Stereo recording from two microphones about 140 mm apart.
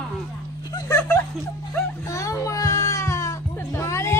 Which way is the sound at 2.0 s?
20° left (ahead or behind).